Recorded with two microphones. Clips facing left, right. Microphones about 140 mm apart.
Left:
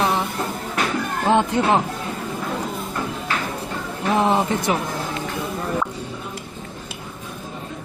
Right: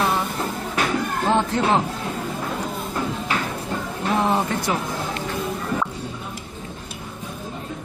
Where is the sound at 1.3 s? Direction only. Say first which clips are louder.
Left 2 dB; 15° left (ahead or behind).